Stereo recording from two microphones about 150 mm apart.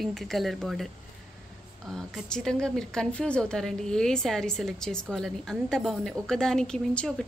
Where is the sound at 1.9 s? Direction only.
5° left (ahead or behind).